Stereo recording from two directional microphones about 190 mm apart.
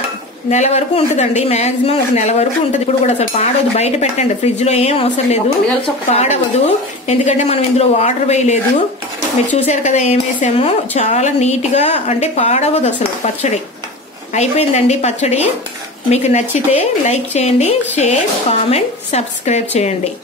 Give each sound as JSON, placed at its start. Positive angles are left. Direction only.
{"t": 0.5, "sound": "speech", "side_deg": 35}
{"t": 9.7, "sound": "speech", "side_deg": 35}
{"t": 14.3, "sound": "speech", "side_deg": 35}